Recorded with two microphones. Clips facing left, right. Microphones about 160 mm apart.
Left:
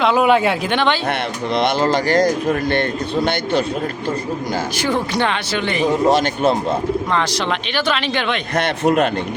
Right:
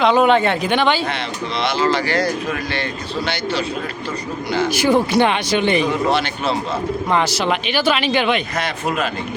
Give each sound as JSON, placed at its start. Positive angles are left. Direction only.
{"t": 0.0, "sound": "speech", "side_deg": 5}
{"t": 1.5, "sound": "speech", "side_deg": 50}
{"t": 4.8, "sound": "speech", "side_deg": -10}
{"t": 5.9, "sound": "speech", "side_deg": 40}
{"t": 7.1, "sound": "speech", "side_deg": -10}
{"t": 8.5, "sound": "a man's voice", "side_deg": 60}